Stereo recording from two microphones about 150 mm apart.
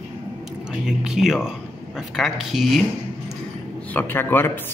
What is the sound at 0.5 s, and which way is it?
Speech, 5° right (ahead or behind).